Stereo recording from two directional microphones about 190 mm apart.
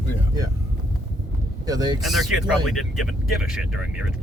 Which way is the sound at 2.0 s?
Centre (ahead or behind).